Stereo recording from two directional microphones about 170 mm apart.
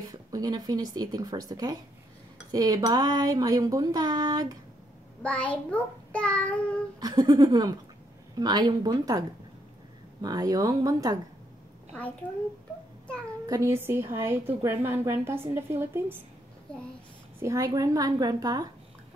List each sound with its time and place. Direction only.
0.1 s speech: 20° right (ahead or behind)
5.2 s child singing: 10° left (ahead or behind)
7.0 s speech: 25° right (ahead or behind)
10.2 s speech: 20° right (ahead or behind)
12.2 s child singing: 10° left (ahead or behind)
13.5 s a woman's voice: 15° right (ahead or behind)
17.4 s speech: 20° right (ahead or behind)